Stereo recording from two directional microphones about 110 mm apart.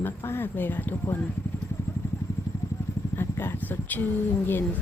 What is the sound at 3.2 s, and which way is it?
Speech, 20° left (ahead or behind).